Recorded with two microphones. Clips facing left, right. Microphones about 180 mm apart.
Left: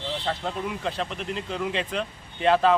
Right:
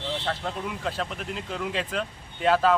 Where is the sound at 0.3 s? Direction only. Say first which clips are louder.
Left 2 dB; centre (ahead or behind).